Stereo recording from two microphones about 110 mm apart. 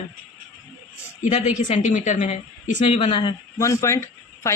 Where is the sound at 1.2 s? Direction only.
90° left.